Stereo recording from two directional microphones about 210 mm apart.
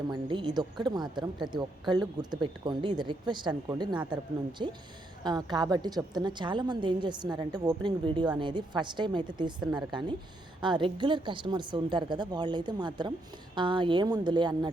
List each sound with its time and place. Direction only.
0.1 s a woman's voice: 20° right (ahead or behind)